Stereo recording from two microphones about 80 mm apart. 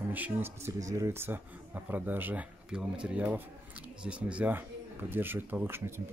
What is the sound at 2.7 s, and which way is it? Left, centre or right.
Speech, centre.